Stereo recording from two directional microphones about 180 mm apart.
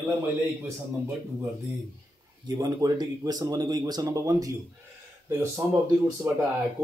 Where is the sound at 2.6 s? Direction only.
20° right (ahead or behind).